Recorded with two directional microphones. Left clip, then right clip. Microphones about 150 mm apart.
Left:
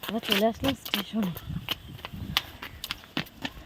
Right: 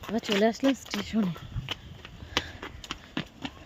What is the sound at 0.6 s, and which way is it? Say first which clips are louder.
Speech: right 1 dB; 90° left.